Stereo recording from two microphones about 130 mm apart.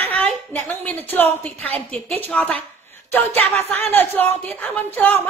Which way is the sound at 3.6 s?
15° left (ahead or behind).